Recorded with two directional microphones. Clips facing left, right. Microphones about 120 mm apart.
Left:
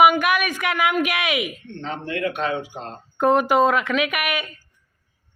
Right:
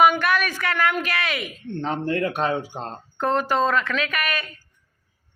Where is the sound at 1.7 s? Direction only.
45° right (ahead or behind).